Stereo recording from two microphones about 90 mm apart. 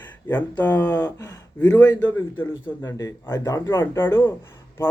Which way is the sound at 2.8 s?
35° left (ahead or behind).